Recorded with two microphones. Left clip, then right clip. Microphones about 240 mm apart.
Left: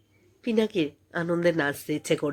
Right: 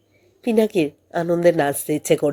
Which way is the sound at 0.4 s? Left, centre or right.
Centre.